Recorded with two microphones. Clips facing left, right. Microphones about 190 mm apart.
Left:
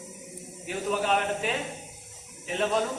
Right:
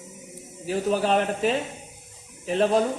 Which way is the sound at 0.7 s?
35° right (ahead or behind).